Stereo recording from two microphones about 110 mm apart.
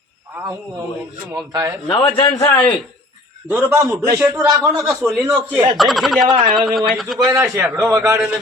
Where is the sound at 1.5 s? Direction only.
30° right (ahead or behind).